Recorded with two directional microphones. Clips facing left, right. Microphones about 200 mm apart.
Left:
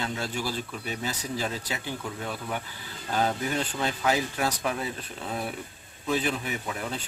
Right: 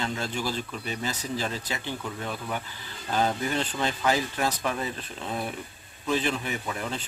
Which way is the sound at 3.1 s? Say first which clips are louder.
Right 1 dB; 5° left (ahead or behind).